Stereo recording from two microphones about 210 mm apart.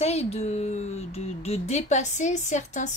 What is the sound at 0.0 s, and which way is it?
Speech, 30° left (ahead or behind).